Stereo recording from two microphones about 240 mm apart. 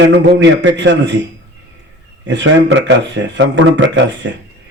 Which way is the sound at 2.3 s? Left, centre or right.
Right.